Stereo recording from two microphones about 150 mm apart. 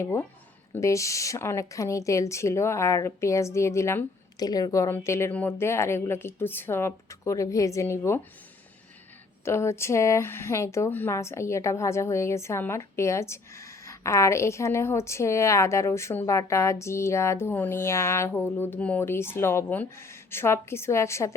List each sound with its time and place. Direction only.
0.0 s speech: 20° left (ahead or behind)
9.4 s speech: 20° left (ahead or behind)